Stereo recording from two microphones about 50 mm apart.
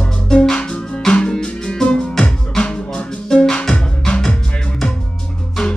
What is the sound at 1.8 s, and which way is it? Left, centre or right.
Music, centre.